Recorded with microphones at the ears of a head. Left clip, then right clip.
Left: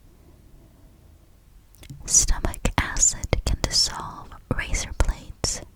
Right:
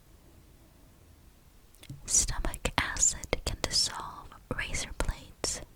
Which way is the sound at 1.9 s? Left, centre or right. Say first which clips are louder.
Left 8 dB; left.